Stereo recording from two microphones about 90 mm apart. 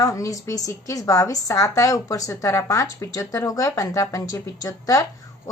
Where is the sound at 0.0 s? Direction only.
40° left (ahead or behind).